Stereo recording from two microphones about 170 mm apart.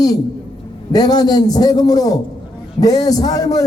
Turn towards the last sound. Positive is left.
turn(degrees=20)  # may be behind; listen again after turning